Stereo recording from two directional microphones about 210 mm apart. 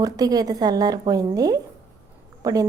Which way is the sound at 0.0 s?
15° right (ahead or behind).